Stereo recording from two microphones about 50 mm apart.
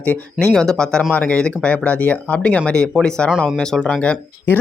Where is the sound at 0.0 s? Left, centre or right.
Left.